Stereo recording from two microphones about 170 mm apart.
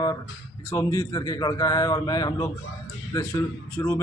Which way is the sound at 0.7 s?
20° left (ahead or behind).